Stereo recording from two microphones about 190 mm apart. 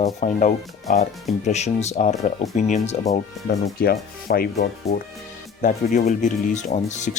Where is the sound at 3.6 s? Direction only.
50° left (ahead or behind).